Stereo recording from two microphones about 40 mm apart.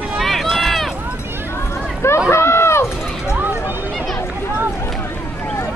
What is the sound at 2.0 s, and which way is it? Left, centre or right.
Run, left.